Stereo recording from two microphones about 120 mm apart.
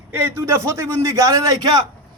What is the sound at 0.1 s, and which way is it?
A man's voice, 20° right (ahead or behind).